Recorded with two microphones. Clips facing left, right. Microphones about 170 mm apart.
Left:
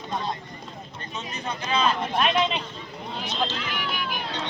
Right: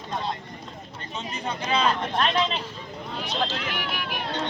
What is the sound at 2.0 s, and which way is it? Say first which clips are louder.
Speech: left 1 dB; 5° left (ahead or behind).